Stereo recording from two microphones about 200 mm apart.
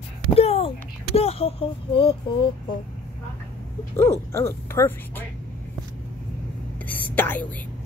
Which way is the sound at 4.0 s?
15° left (ahead or behind).